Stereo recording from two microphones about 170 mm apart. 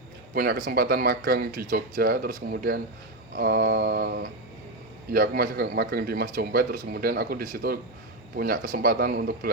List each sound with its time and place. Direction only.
0.3 s speech: 60° right (ahead or behind)